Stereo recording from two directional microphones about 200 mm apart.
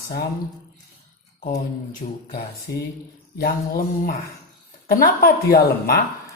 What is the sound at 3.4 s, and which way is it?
Speech, 50° left (ahead or behind).